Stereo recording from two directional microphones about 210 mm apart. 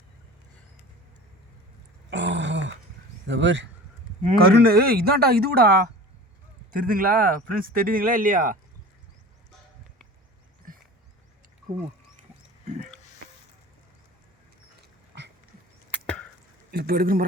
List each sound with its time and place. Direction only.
2.0 s groan: 60° right (ahead or behind)
3.2 s speech: 60° right (ahead or behind)
4.4 s speech: 45° right (ahead or behind)
14.8 s dog: 55° right (ahead or behind)
15.9 s chop: 5° left (ahead or behind)
16.7 s speech: 45° right (ahead or behind)